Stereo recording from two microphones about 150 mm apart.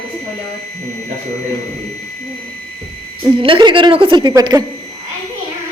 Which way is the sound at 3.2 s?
30° right (ahead or behind).